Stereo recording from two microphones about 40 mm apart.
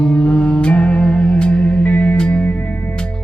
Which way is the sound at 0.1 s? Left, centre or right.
Left.